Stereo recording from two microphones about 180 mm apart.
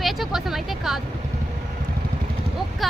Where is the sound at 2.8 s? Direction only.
Centre (ahead or behind).